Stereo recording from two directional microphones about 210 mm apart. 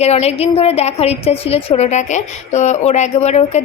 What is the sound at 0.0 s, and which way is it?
A woman's voice, 30° left (ahead or behind).